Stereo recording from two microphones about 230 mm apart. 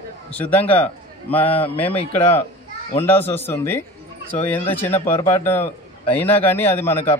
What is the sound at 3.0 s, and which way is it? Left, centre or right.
A man's voice, centre.